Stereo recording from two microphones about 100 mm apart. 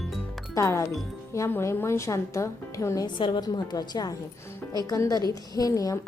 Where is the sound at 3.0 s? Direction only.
50° left (ahead or behind).